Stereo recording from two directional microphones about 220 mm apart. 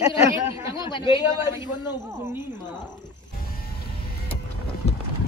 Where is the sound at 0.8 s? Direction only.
20° left (ahead or behind).